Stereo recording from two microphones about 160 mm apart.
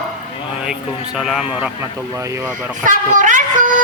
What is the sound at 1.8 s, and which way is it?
Speech, 20° right (ahead or behind).